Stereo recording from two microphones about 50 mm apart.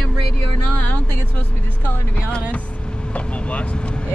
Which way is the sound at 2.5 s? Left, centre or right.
Left.